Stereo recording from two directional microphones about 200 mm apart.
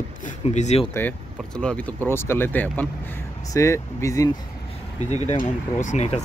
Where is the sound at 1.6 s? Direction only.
5° left (ahead or behind).